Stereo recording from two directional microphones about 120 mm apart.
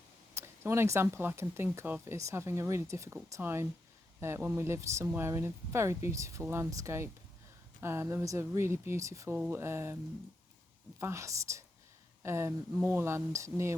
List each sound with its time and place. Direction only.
0.3 s speech: 20° right (ahead or behind)
11.0 s speech: 25° right (ahead or behind)